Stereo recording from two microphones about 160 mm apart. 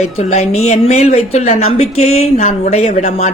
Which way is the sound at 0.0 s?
45° left (ahead or behind).